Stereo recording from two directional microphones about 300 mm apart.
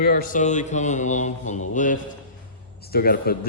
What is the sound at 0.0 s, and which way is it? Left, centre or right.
Mantra, left.